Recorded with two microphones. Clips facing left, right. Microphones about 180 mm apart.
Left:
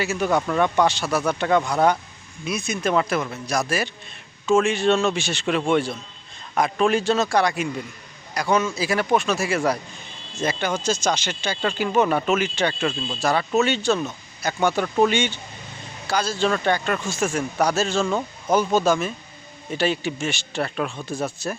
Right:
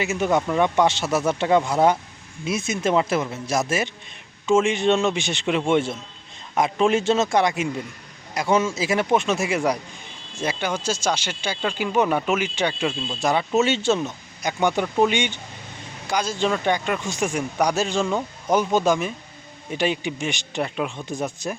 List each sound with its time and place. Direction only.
0.0 s speech: 20° right (ahead or behind)